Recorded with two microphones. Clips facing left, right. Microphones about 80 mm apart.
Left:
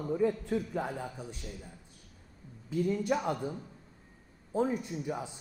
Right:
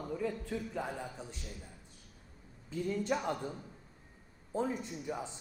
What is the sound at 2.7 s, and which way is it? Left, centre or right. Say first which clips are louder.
A man's voice: left 4 dB; centre.